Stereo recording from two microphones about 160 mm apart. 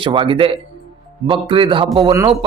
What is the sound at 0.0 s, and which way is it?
Speech, 30° right (ahead or behind).